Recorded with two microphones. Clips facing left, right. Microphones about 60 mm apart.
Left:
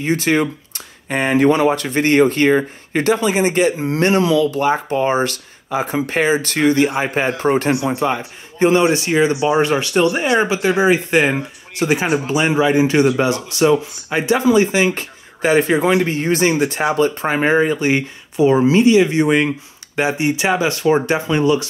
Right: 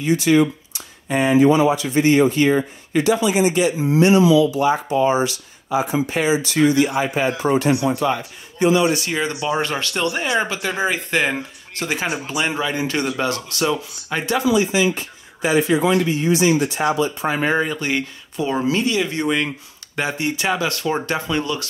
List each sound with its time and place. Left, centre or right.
0.0 s speech: left
8.9 s speech: left
14.4 s speech: left
17.5 s speech: left